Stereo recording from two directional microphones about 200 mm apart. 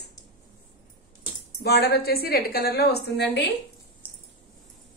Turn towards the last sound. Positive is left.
turn(degrees=-10)  # may be behind; listen again after turning